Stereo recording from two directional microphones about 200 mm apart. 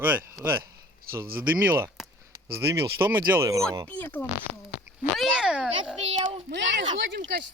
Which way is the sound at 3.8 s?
10° left (ahead or behind).